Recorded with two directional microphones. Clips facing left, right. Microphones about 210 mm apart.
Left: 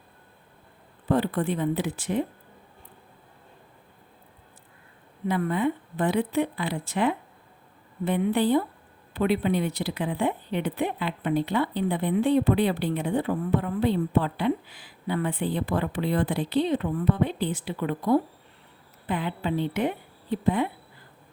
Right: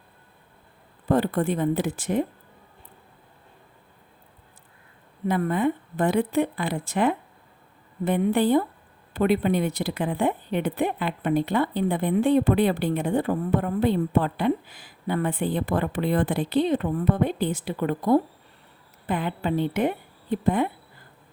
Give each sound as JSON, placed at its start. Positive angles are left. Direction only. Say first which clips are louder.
{"t": 1.0, "sound": "a woman's voice", "louder": "right 2 dB", "side_deg": -45}
{"t": 5.3, "sound": "a woman's voice", "louder": "right 2 dB", "side_deg": -45}